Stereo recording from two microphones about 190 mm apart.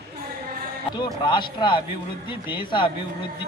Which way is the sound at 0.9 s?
25° left (ahead or behind).